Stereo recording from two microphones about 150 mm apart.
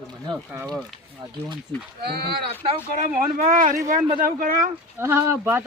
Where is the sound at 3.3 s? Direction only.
60° right (ahead or behind).